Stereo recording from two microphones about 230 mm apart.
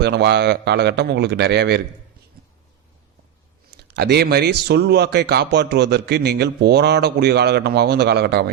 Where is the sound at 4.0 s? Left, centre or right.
Right.